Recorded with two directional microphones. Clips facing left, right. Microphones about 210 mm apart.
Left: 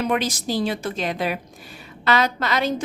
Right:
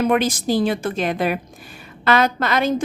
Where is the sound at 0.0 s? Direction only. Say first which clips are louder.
Right 5 dB; 50° right (ahead or behind).